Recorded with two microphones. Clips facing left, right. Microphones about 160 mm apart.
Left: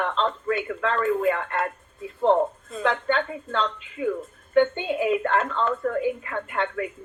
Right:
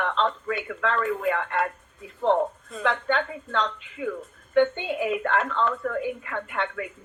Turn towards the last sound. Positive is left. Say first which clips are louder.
# left 2 dB
turn(degrees=40)  # may be behind; listen again after turning